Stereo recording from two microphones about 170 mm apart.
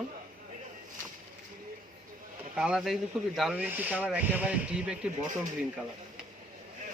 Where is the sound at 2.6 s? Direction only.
5° right (ahead or behind).